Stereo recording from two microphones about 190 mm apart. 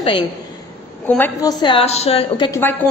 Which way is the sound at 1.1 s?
10° left (ahead or behind).